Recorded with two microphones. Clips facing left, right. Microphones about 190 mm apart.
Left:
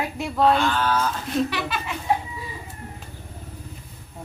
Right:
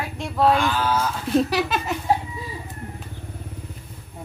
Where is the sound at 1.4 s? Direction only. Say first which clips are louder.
Right 5 dB; 40° right (ahead or behind).